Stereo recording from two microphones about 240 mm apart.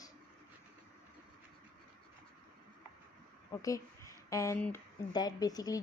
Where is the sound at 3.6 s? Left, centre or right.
Centre.